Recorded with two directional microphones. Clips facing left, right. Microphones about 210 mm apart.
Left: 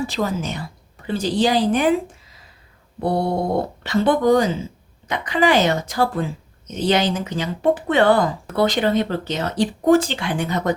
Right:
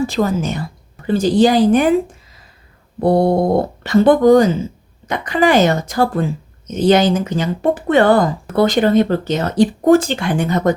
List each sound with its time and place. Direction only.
0.1 s speech: 50° right (ahead or behind)
3.0 s speech: 45° right (ahead or behind)